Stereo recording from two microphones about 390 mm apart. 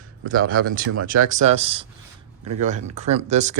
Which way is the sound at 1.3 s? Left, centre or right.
Centre.